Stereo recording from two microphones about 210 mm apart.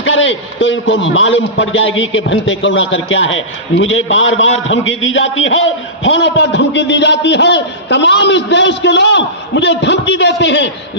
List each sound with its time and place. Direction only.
0.0 s a man's voice: 60° left (ahead or behind)